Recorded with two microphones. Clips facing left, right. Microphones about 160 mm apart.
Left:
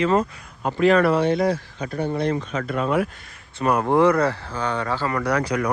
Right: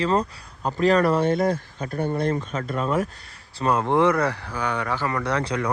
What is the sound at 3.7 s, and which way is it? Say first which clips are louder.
Speech: left 2 dB; 15° left (ahead or behind).